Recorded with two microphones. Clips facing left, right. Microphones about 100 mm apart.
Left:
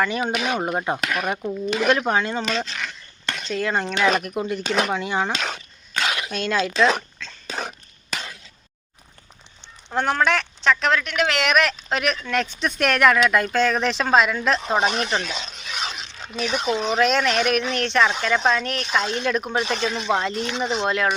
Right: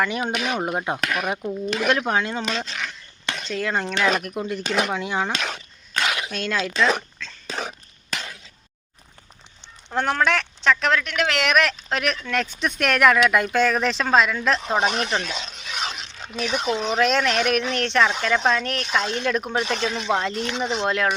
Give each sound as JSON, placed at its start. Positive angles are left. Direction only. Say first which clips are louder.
{"t": 0.0, "sound": "speech", "louder": "left 1 dB", "side_deg": 0}
{"t": 1.4, "sound": "speech", "louder": "left 1 dB", "side_deg": 5}
{"t": 3.3, "sound": "speech", "louder": "left 2 dB", "side_deg": 0}
{"t": 7.2, "sound": "dog", "louder": "even", "side_deg": 0}
{"t": 9.9, "sound": "speech", "louder": "left 1 dB", "side_deg": 10}
{"t": 16.3, "sound": "speech", "louder": "even", "side_deg": -5}
{"t": 16.6, "sound": "speech", "louder": "left 1 dB", "side_deg": 15}